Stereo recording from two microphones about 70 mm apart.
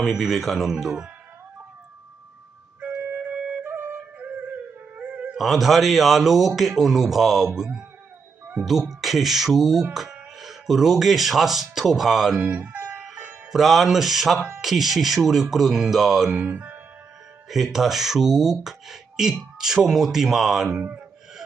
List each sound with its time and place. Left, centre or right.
0.0 s speech: centre
3.2 s wind instrument: centre
3.6 s music: right
5.4 s speech: centre
12.4 s music: right
13.5 s speech: centre
16.4 s speech: right
17.5 s speech: centre